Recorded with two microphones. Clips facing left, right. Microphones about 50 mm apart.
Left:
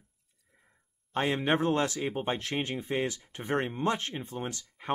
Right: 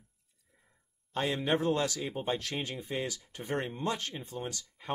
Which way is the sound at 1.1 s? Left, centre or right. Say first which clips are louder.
Left 3 dB; left.